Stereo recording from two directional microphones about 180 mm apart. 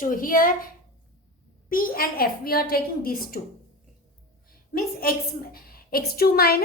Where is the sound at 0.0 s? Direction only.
50° left (ahead or behind).